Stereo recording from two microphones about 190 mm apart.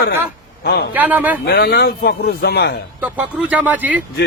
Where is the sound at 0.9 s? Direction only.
10° right (ahead or behind).